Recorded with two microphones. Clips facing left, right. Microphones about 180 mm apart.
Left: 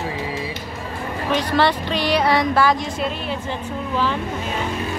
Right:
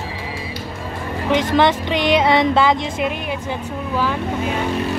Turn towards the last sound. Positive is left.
turn(degrees=-10)  # may be behind; listen again after turning